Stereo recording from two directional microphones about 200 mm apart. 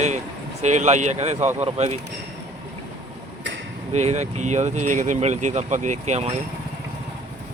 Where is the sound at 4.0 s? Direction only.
35° right (ahead or behind).